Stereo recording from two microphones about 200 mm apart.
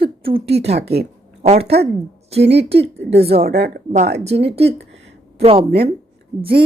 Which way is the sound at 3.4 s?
50° right (ahead or behind).